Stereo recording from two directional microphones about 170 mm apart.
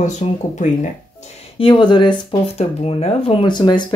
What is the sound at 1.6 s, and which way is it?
Speech, 30° left (ahead or behind).